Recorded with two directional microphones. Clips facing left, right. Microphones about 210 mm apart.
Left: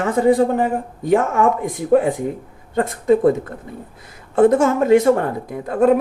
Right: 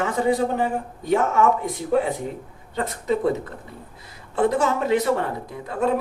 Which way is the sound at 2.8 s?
50° left (ahead or behind).